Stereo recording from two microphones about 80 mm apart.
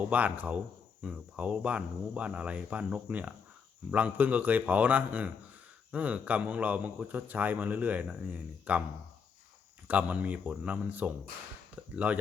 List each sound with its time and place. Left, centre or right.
0.1 s a man's voice: centre
9.8 s speech: centre